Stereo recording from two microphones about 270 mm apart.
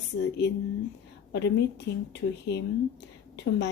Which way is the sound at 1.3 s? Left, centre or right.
Left.